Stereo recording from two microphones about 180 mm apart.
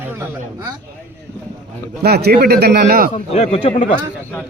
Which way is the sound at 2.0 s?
60° right (ahead or behind).